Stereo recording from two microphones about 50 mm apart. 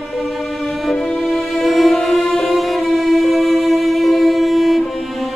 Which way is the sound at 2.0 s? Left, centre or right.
Centre.